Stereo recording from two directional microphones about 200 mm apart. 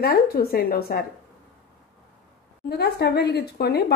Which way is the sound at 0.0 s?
50° left (ahead or behind).